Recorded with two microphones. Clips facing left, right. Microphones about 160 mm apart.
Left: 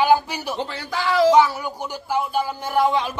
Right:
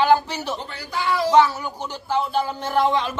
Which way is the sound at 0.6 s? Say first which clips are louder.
Left 3 dB; 90° left.